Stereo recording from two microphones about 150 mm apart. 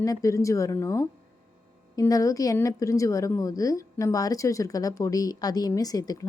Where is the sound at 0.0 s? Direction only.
20° left (ahead or behind).